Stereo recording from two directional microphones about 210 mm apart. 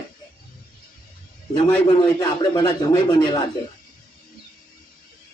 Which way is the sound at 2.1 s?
20° left (ahead or behind).